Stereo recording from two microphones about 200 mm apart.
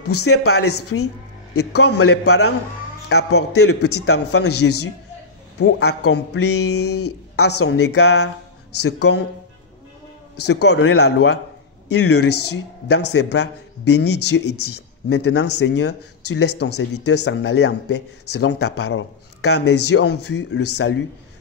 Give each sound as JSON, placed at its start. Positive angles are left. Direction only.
{"t": 0.0, "sound": "speech", "side_deg": 90}
{"t": 3.2, "sound": "speech", "side_deg": 90}
{"t": 5.6, "sound": "speech", "side_deg": 65}
{"t": 10.4, "sound": "speech", "side_deg": 60}
{"t": 11.9, "sound": "speech", "side_deg": 60}